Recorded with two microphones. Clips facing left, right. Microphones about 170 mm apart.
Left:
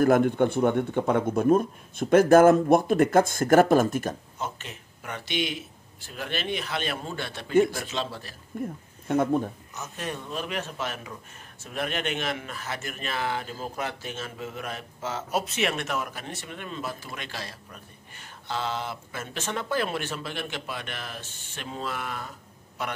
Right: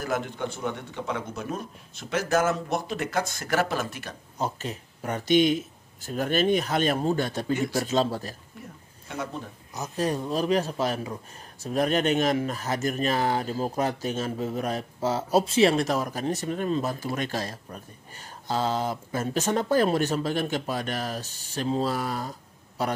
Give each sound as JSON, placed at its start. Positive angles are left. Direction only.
{"t": 0.0, "sound": "speech", "side_deg": 55}
{"t": 4.4, "sound": "speech", "side_deg": -35}
{"t": 9.0, "sound": "speech", "side_deg": 50}
{"t": 9.8, "sound": "speech", "side_deg": -35}